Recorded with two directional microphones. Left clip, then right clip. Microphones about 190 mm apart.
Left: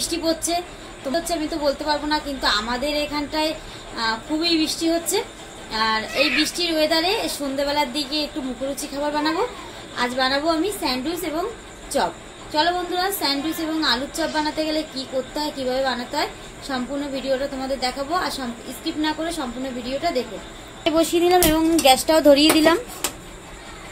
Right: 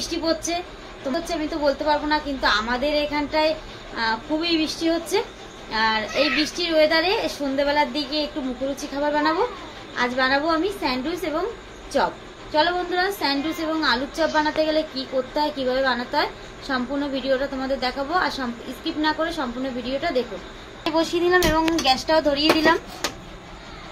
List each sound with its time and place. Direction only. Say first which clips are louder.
0.1 s a woman's voice: even; centre (ahead or behind)
20.8 s speech: left 3 dB; 55° left (ahead or behind)